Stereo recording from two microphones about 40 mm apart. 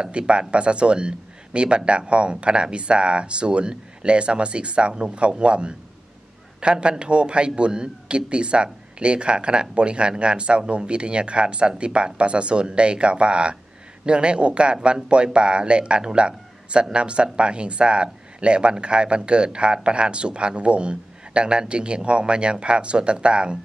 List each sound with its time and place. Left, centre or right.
0.3 s speech: right